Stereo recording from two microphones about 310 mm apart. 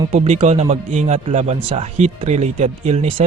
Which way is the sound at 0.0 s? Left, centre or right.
Centre.